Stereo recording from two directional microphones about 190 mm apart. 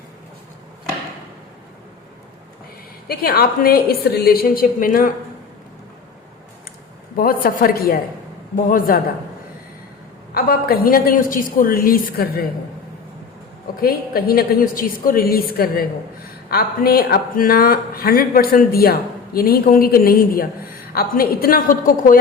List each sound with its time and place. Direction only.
3.1 s speech: 50° left (ahead or behind)
7.2 s speech: 50° left (ahead or behind)
10.3 s speech: 55° left (ahead or behind)
13.8 s speech: 50° left (ahead or behind)